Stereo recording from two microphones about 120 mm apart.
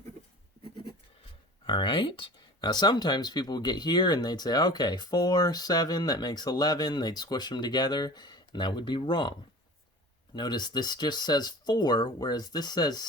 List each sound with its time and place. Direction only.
1.6 s speech: 45° left (ahead or behind)